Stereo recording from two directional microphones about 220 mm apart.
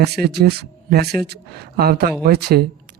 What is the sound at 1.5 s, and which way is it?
Speech, 45° right (ahead or behind).